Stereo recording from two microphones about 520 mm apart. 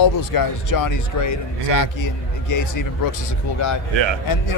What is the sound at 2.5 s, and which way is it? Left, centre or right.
Speech, left.